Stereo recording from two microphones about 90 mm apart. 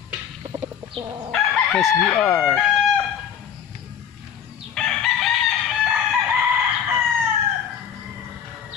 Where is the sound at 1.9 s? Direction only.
10° left (ahead or behind).